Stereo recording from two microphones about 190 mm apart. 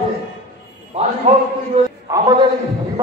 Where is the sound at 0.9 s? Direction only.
35° right (ahead or behind).